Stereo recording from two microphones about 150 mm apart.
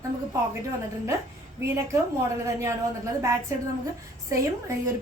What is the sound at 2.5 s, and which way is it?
Speech, 20° right (ahead or behind).